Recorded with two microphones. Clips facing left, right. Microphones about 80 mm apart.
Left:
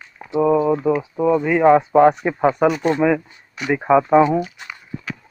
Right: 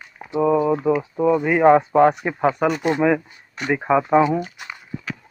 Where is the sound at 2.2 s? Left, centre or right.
Centre.